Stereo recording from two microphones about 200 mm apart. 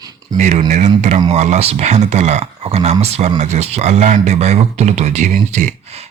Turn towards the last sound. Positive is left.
turn(degrees=-40)  # may be behind; listen again after turning